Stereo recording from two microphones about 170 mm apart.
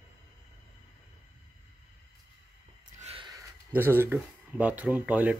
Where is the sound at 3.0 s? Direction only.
30° right (ahead or behind).